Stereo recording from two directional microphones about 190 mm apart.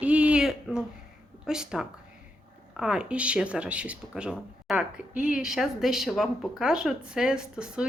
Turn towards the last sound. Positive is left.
turn(degrees=-5)  # may be behind; listen again after turning